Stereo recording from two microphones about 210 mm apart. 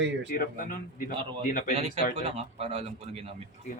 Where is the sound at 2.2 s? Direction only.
30° right (ahead or behind).